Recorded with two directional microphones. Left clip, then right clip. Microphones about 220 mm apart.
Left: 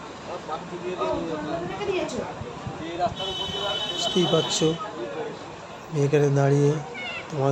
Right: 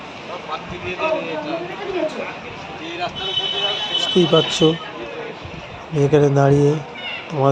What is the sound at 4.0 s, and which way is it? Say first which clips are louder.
Speech: right 8 dB; 15° right (ahead or behind).